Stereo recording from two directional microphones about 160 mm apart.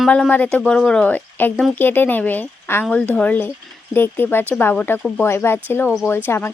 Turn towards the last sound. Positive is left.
turn(degrees=15)  # may be behind; listen again after turning